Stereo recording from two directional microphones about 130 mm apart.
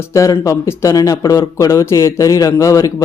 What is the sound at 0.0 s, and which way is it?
Speech, 25° left (ahead or behind).